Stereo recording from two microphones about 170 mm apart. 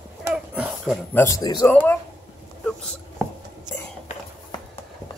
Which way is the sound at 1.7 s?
10° left (ahead or behind).